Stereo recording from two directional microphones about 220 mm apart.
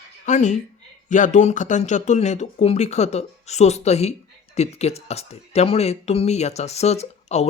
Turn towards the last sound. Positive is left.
turn(degrees=30)  # may be behind; listen again after turning